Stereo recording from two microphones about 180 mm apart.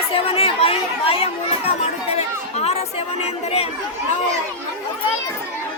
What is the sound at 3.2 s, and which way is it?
Speech, 35° left (ahead or behind).